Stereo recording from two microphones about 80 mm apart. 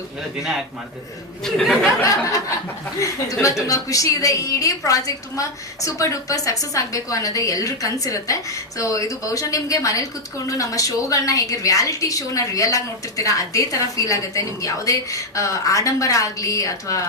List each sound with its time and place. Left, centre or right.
1.5 s speech: centre
2.0 s a woman's voice: left
3.7 s a woman's voice: left